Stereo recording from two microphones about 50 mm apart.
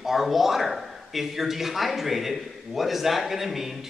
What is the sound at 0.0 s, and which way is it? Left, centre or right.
Speech, centre.